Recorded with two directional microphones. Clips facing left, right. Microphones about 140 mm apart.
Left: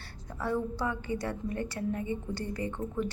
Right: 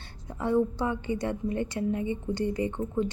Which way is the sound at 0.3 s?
20° right (ahead or behind).